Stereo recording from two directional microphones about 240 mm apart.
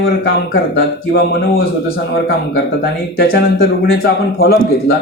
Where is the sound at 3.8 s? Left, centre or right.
Left.